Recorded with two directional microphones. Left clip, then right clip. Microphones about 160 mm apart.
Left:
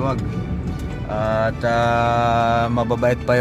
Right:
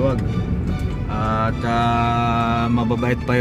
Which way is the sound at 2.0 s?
40° left (ahead or behind).